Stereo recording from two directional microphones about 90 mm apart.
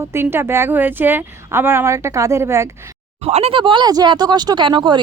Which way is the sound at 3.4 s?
70° right (ahead or behind).